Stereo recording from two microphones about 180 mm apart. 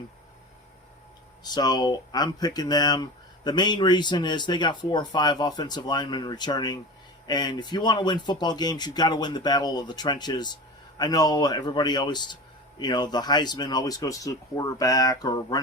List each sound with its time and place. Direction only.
1.5 s speech: 20° left (ahead or behind)